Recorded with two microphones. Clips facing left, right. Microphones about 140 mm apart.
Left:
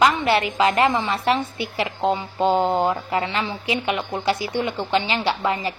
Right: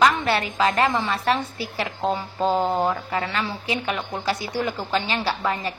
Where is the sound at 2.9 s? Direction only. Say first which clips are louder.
Left 2 dB; 20° left (ahead or behind).